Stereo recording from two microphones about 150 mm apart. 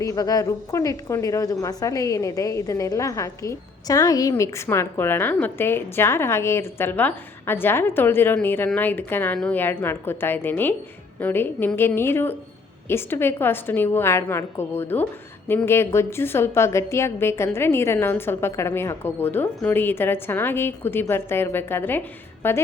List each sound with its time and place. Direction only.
0.0 s a woman's voice: 25° left (ahead or behind)